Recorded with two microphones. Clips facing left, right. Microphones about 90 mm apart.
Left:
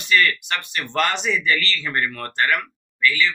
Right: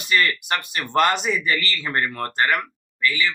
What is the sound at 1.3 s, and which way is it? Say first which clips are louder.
Speech: left 1 dB; 30° right (ahead or behind).